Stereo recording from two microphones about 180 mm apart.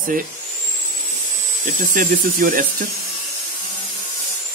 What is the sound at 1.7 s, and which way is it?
Speech, 50° right (ahead or behind).